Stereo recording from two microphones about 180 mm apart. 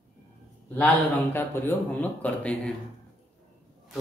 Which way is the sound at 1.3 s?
10° left (ahead or behind).